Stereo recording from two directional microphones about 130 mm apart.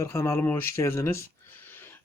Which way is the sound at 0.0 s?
20° left (ahead or behind).